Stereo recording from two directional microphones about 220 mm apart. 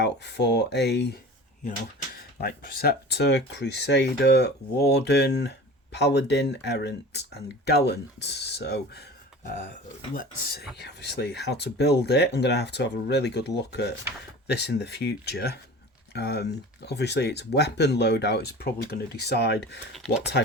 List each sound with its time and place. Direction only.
0.0 s speech: 50° left (ahead or behind)
2.1 s speech: 40° left (ahead or behind)
10.2 s speech: 45° left (ahead or behind)
19.9 s speech: centre (ahead or behind)